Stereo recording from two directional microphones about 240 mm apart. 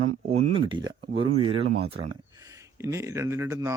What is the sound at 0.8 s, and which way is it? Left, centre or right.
Speech, right.